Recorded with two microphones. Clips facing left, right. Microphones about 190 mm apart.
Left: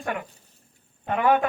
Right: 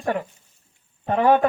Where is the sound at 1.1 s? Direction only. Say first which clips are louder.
Right 4 dB; 35° right (ahead or behind).